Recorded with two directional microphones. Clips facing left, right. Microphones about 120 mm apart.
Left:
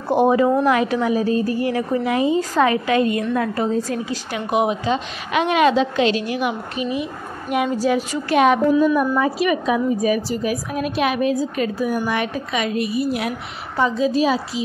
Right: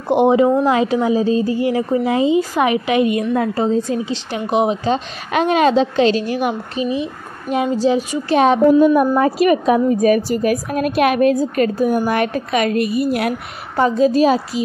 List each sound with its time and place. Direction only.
0.1 s a woman's voice: 20° right (ahead or behind)
8.8 s a woman's voice: 45° right (ahead or behind)